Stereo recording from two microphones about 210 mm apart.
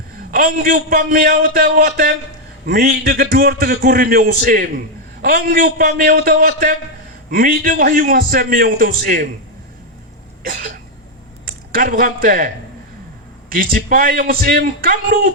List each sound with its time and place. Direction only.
0.3 s a man's voice: 40° right (ahead or behind)
11.4 s speech: 45° right (ahead or behind)
13.5 s a man's voice: 45° right (ahead or behind)